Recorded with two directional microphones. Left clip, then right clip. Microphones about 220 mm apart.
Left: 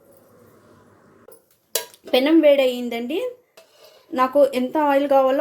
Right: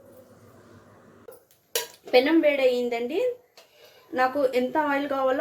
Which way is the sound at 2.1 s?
40° left (ahead or behind).